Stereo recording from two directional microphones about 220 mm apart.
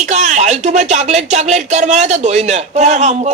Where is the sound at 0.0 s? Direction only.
30° right (ahead or behind).